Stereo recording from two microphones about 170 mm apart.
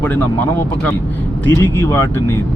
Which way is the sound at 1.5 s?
15° left (ahead or behind).